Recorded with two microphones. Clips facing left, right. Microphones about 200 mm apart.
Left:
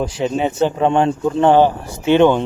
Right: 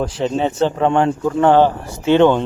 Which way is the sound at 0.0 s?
10° left (ahead or behind).